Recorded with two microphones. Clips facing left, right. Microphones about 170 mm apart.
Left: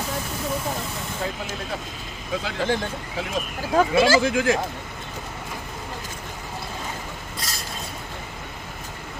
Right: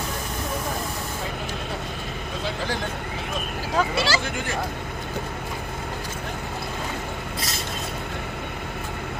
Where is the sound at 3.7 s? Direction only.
50° left (ahead or behind).